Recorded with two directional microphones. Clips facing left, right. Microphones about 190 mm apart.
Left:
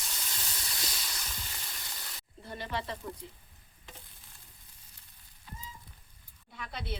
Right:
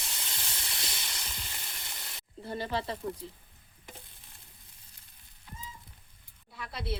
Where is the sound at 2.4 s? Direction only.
30° right (ahead or behind).